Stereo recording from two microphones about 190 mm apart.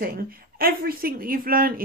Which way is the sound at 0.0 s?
50° right (ahead or behind).